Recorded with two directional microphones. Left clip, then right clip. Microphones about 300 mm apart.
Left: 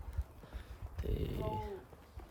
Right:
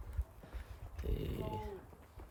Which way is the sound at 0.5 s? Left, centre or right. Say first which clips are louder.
Left 3 dB; centre.